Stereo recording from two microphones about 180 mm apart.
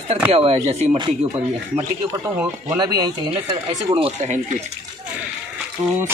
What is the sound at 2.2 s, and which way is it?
Speech, 15° right (ahead or behind).